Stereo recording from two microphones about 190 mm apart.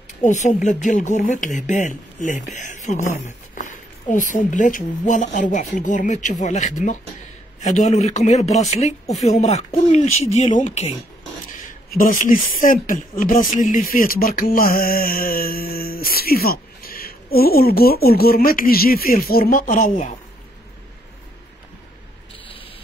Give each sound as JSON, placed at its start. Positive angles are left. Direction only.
{"t": 0.2, "sound": "speech", "side_deg": 40}
{"t": 11.9, "sound": "speech", "side_deg": 45}